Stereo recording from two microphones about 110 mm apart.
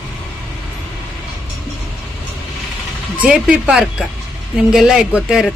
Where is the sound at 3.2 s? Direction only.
10° right (ahead or behind).